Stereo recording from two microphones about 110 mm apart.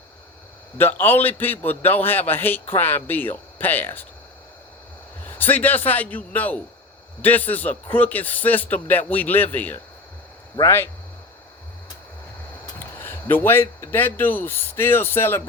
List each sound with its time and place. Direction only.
0.8 s a man's voice: 20° left (ahead or behind)
5.2 s a man's voice: 15° left (ahead or behind)
12.8 s speech: 20° left (ahead or behind)